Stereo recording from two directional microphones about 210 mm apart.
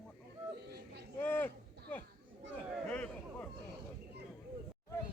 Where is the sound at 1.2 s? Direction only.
10° left (ahead or behind).